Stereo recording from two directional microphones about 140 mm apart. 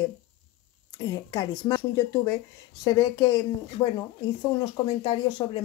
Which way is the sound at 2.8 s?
30° left (ahead or behind).